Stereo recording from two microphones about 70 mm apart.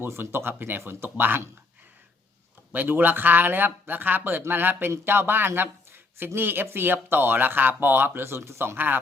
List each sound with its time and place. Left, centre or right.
0.0 s speech: right
2.7 s speech: right